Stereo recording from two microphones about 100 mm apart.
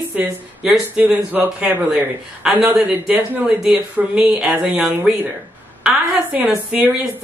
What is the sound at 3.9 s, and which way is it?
A man's voice, 5° right (ahead or behind).